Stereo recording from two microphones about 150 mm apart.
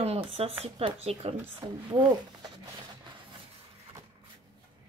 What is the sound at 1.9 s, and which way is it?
Speech, 30° right (ahead or behind).